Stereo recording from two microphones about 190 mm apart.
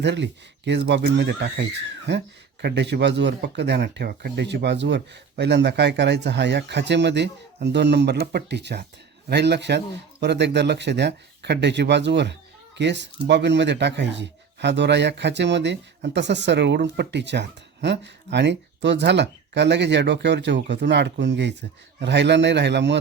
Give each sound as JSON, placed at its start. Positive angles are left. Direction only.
{"t": 0.0, "sound": "a man's voice", "side_deg": -65}